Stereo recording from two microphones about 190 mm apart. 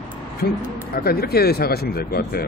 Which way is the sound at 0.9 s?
55° left (ahead or behind).